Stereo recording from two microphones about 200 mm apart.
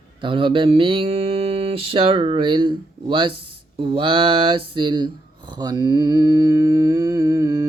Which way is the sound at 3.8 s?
25° right (ahead or behind).